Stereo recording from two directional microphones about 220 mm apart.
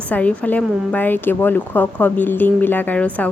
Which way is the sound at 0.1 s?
5° left (ahead or behind).